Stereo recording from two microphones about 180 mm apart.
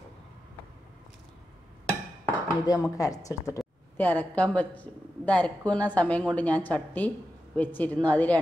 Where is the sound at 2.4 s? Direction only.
20° left (ahead or behind).